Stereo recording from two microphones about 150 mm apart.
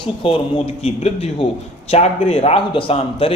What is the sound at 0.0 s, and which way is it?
A man's voice, 35° left (ahead or behind).